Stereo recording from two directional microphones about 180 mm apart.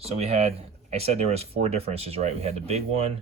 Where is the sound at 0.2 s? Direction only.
35° right (ahead or behind).